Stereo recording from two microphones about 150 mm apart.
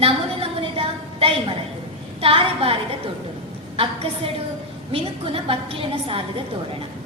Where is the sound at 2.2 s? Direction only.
40° right (ahead or behind).